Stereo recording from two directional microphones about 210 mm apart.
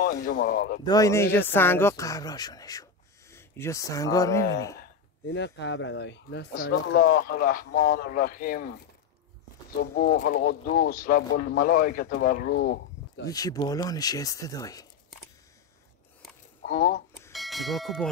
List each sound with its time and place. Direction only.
0.0 s speech: 40° left (ahead or behind)
0.8 s speech: 15° left (ahead or behind)
5.2 s speech: 55° left (ahead or behind)
7.0 s speech: 45° left (ahead or behind)
9.9 s speech: 45° left (ahead or behind)
13.3 s speech: 15° left (ahead or behind)
16.6 s speech: 40° left (ahead or behind)
17.3 s bell: centre (ahead or behind)